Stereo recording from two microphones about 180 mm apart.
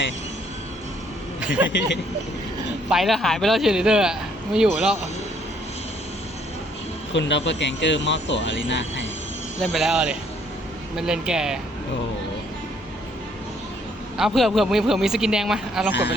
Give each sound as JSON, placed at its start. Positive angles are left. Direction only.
{"t": 1.4, "sound": "a man's voice", "side_deg": -5}
{"t": 2.9, "sound": "speech", "side_deg": 0}
{"t": 7.1, "sound": "speech", "side_deg": 80}
{"t": 9.7, "sound": "speech", "side_deg": -5}
{"t": 14.2, "sound": "speech", "side_deg": 0}
{"t": 15.9, "sound": "speech", "side_deg": 75}